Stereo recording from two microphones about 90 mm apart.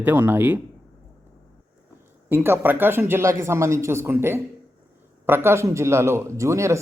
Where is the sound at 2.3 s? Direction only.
20° right (ahead or behind).